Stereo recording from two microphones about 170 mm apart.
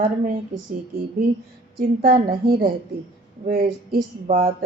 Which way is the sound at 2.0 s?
60° right (ahead or behind).